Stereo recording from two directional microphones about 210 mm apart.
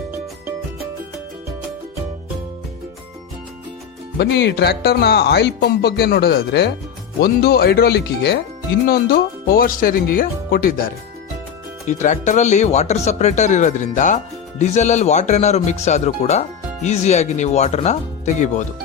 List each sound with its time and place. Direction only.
4.2 s speech: 55° left (ahead or behind); by 18.6 s 35° left (ahead or behind)